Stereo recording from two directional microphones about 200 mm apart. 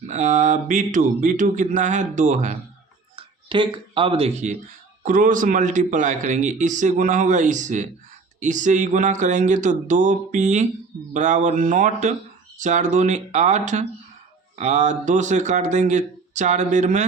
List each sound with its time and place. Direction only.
0.0 s a man's voice: 35° right (ahead or behind)
3.2 s a man's voice: 25° right (ahead or behind)